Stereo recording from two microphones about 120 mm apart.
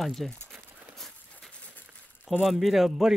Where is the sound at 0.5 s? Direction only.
15° right (ahead or behind).